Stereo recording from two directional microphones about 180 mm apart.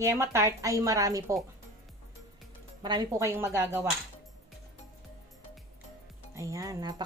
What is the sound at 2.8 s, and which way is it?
A woman's voice, 20° right (ahead or behind).